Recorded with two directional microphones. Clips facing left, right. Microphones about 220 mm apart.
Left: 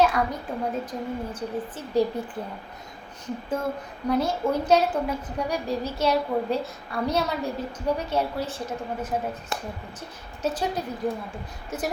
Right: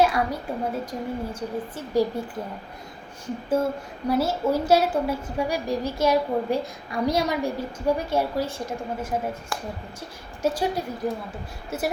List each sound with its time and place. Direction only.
0.0 s a woman's voice: 10° right (ahead or behind)
3.6 s a woman's voice: 10° right (ahead or behind)
9.5 s speech: 20° left (ahead or behind)
10.4 s a woman's voice: 10° right (ahead or behind)
11.7 s a woman's voice: 10° right (ahead or behind)